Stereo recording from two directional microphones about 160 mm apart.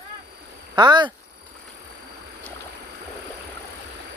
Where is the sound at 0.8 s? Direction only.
30° right (ahead or behind).